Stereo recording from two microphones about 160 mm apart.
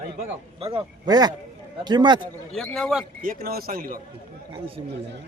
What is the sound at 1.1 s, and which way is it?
A man's voice, 25° right (ahead or behind).